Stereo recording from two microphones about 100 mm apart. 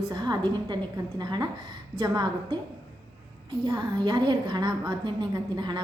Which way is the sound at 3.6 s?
50° right (ahead or behind).